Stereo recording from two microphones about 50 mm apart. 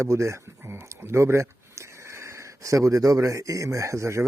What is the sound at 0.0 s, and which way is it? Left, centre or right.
Speech, right.